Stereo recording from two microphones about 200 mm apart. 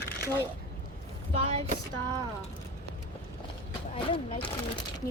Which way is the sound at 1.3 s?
30° right (ahead or behind).